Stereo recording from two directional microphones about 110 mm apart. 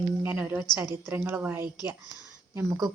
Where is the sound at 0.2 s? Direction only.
15° right (ahead or behind).